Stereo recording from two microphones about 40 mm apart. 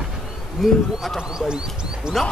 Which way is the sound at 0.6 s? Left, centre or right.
Centre.